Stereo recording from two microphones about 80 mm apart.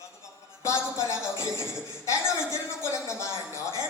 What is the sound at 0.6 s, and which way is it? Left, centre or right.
Speech, left.